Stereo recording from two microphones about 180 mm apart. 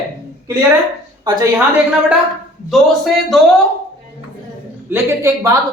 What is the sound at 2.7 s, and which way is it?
Speech, centre (ahead or behind).